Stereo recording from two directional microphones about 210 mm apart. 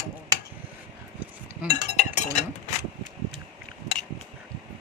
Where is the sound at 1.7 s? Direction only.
35° left (ahead or behind).